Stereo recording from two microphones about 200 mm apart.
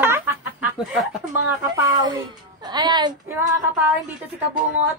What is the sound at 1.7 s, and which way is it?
A woman's voice, 20° right (ahead or behind).